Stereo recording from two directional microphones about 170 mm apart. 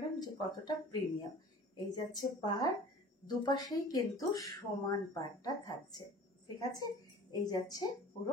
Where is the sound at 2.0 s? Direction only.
25° left (ahead or behind).